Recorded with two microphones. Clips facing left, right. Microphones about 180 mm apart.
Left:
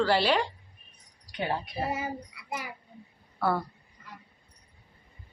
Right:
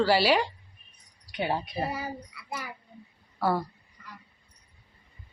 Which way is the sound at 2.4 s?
15° left (ahead or behind).